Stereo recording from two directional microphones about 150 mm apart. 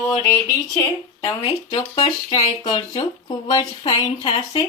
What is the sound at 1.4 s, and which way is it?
Speech, 35° left (ahead or behind).